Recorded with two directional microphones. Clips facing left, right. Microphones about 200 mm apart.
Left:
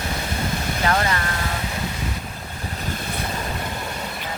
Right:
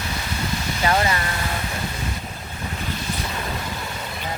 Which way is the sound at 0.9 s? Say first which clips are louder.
Right 1 dB; 10° right (ahead or behind).